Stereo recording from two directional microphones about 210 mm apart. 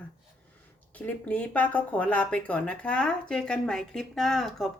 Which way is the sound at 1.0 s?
5° left (ahead or behind).